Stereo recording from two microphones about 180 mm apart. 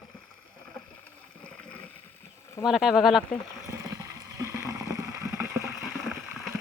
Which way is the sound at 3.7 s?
15° right (ahead or behind).